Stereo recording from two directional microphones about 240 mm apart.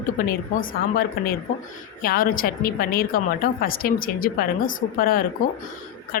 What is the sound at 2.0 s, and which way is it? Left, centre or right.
Speech, left.